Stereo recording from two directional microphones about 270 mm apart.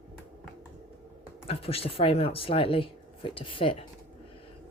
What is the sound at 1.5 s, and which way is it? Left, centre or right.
Speech, left.